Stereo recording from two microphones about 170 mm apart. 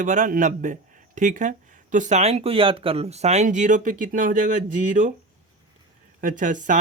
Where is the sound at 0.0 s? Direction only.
50° right (ahead or behind).